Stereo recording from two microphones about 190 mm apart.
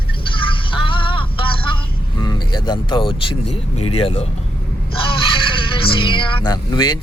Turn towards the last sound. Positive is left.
turn(degrees=25)  # may be behind; listen again after turning